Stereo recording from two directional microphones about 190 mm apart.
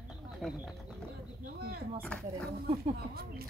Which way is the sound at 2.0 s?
5° left (ahead or behind).